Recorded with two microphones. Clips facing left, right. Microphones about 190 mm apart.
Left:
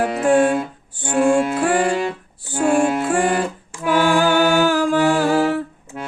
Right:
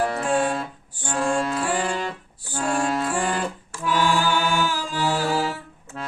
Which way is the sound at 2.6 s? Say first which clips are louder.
Left 7 dB; 15° left (ahead or behind).